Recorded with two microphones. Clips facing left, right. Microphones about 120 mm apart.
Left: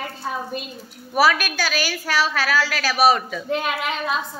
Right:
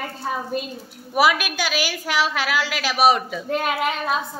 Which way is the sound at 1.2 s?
15° right (ahead or behind).